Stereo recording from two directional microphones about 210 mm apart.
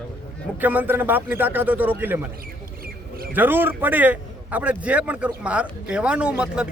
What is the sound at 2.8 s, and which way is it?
Mouse, 45° right (ahead or behind).